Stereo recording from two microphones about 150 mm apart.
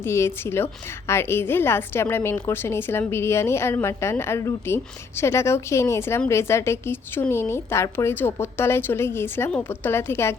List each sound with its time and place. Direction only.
0.0 s a woman's voice: 15° left (ahead or behind)